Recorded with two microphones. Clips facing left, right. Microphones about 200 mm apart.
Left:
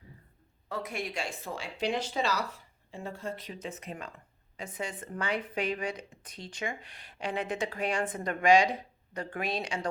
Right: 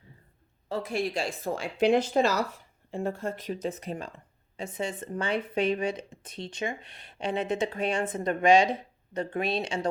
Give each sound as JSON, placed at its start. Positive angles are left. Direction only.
{"t": 0.7, "sound": "speech", "side_deg": -30}